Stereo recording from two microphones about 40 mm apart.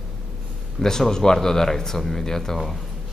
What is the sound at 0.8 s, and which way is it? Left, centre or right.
Speech, centre.